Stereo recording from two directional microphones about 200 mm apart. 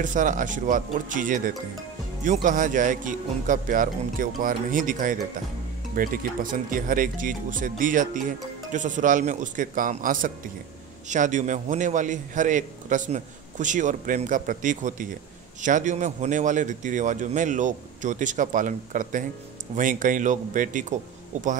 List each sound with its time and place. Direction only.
0.0 s a man's voice: 40° right (ahead or behind)